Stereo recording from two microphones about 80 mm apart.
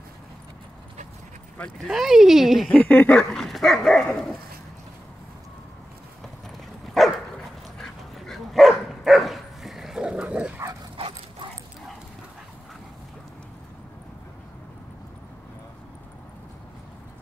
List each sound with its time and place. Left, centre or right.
1.9 s speech: centre
2.7 s speech: left
3.3 s dog: centre
6.9 s dog: centre